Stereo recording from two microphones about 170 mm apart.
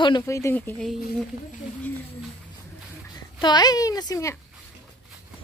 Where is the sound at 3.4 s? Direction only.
25° left (ahead or behind).